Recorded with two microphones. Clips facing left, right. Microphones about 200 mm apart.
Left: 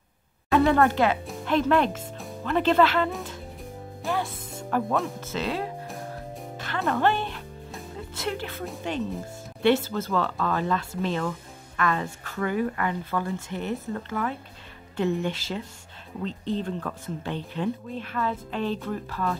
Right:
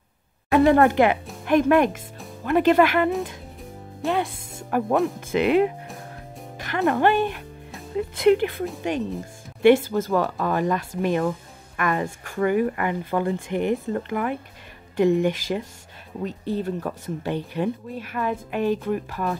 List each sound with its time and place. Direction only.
0.5 s speech: 15° right (ahead or behind)
4.1 s speech: 15° right (ahead or behind)
6.9 s speech: 15° right (ahead or behind)
8.2 s a woman's voice: 15° right (ahead or behind)